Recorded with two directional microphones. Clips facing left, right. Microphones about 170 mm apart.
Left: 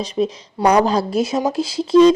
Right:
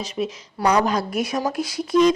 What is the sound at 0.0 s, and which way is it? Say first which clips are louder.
Speech: left 6 dB; 35° left (ahead or behind).